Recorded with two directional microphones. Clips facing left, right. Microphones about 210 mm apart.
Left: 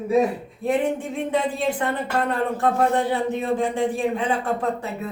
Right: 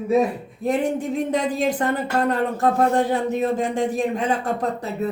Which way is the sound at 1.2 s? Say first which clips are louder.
Left 1 dB; 40° right (ahead or behind).